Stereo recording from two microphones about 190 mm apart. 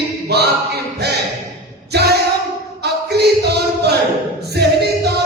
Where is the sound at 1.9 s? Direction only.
60° right (ahead or behind).